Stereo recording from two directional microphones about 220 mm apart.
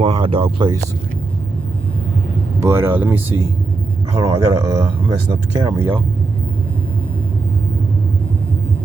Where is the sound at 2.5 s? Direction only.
10° right (ahead or behind).